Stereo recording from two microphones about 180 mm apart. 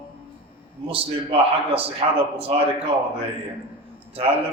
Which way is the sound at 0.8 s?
30° right (ahead or behind).